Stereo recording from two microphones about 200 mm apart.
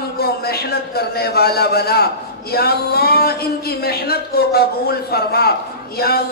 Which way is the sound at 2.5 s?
50° left (ahead or behind).